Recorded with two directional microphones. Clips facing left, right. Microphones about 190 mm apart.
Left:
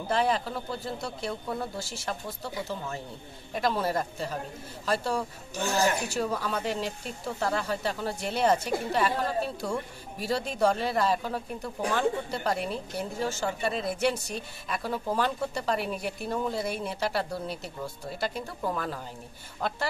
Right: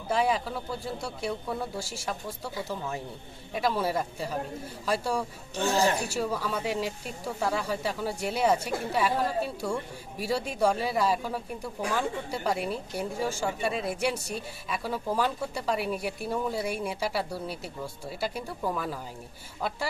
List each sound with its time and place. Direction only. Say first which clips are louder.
0.1 s speech: even; 10° right (ahead or behind)
3.5 s speech: even; 5° right (ahead or behind)
5.6 s speech: right 1 dB; 30° right (ahead or behind)
6.0 s speech: even; 5° right (ahead or behind)